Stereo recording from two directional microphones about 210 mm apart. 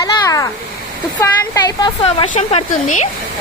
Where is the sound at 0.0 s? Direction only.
15° left (ahead or behind).